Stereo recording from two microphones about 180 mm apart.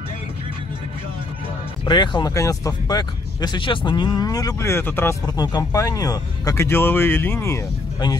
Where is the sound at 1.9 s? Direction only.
25° left (ahead or behind).